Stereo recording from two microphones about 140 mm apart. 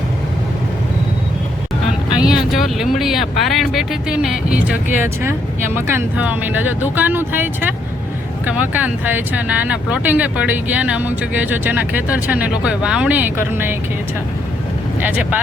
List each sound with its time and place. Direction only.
2.2 s speech: 5° right (ahead or behind)
15.0 s speech: 10° right (ahead or behind)